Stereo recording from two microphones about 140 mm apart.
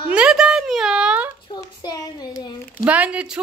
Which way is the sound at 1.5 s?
30° left (ahead or behind).